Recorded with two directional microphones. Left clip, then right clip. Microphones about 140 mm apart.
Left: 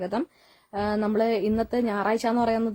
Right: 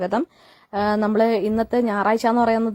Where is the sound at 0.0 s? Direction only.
35° right (ahead or behind).